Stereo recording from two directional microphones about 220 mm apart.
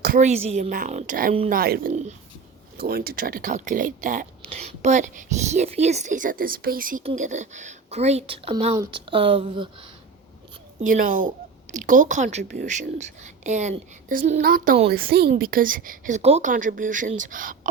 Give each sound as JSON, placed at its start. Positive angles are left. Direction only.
{"t": 0.0, "sound": "a woman's voice", "side_deg": -35}
{"t": 10.8, "sound": "a woman's voice", "side_deg": -35}